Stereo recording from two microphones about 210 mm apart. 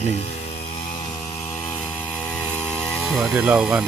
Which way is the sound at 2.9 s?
Centre (ahead or behind).